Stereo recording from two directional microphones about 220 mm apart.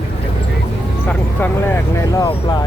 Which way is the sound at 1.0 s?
10° left (ahead or behind).